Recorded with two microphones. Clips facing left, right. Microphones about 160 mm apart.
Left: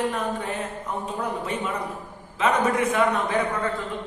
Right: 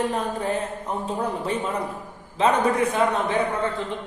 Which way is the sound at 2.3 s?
30° right (ahead or behind).